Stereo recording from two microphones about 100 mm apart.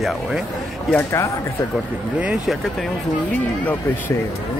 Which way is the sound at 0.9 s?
30° left (ahead or behind).